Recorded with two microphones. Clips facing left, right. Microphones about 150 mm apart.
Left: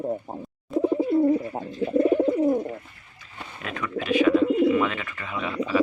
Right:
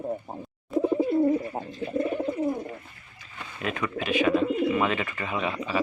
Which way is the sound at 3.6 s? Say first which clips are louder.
Left 1 dB; 5° right (ahead or behind).